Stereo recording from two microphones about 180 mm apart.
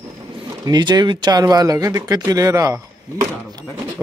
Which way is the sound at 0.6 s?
20° right (ahead or behind).